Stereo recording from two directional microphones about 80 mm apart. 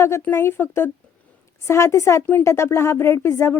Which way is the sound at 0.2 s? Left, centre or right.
Left.